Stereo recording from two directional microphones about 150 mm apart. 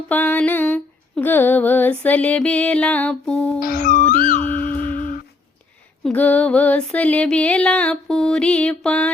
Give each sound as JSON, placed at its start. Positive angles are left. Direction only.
{"t": 0.1, "sound": "female singing", "side_deg": 10}
{"t": 3.6, "sound": "music", "side_deg": 60}
{"t": 6.0, "sound": "female singing", "side_deg": 10}